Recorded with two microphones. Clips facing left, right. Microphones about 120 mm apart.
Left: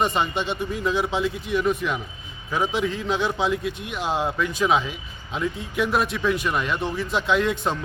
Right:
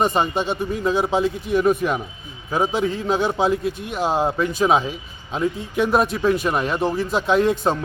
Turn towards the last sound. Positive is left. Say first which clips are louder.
# right 4 dB
turn(degrees=-40)  # may be behind; listen again after turning